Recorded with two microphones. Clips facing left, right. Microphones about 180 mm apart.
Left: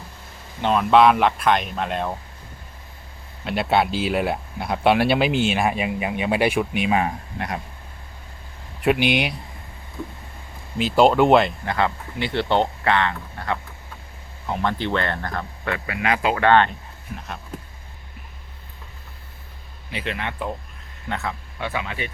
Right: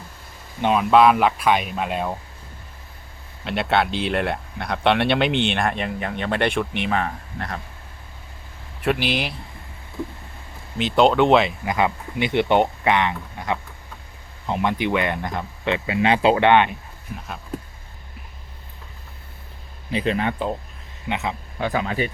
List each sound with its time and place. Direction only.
0.6 s speech: 5° right (ahead or behind)
3.4 s speech: centre (ahead or behind); by 7.6 s 20° left (ahead or behind)
9.1 s speech: centre (ahead or behind)
10.8 s speech: centre (ahead or behind)
11.7 s speech: 15° right (ahead or behind)
17.2 s speech: centre (ahead or behind)
19.9 s speech: 35° right (ahead or behind)
21.1 s speech: 20° right (ahead or behind)
21.6 s speech: 40° right (ahead or behind)